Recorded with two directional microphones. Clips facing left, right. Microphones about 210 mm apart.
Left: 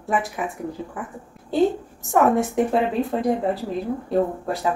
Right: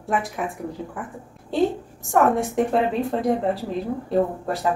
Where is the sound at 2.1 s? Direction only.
Centre (ahead or behind).